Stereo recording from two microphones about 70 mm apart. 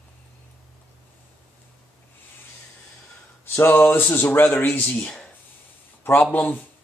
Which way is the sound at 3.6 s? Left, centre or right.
Left.